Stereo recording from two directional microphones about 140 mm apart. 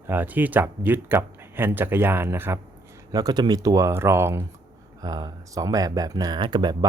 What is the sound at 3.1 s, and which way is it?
Speech, 30° right (ahead or behind).